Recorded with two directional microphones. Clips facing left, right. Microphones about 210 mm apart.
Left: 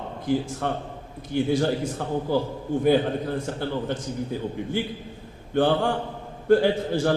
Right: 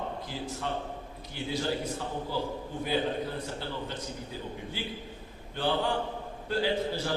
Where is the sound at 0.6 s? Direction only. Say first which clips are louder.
Left 5 dB; 55° left (ahead or behind).